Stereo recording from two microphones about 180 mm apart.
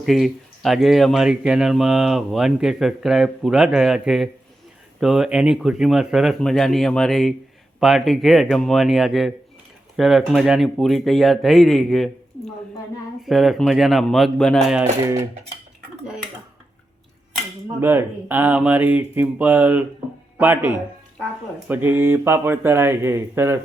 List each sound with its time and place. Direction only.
0.0 s speech: centre (ahead or behind)
13.2 s speech: centre (ahead or behind)
15.0 s speech: 15° right (ahead or behind)
17.7 s speech: 10° right (ahead or behind)